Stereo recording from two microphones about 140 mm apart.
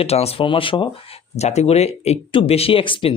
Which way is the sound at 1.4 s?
50° left (ahead or behind).